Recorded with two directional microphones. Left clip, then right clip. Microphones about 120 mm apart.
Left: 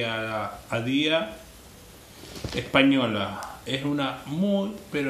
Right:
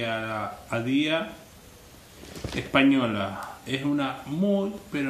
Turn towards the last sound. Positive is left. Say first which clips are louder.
# left 1 dB
turn(degrees=20)  # may be behind; listen again after turning